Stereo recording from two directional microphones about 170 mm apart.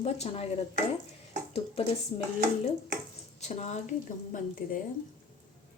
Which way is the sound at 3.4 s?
40° left (ahead or behind).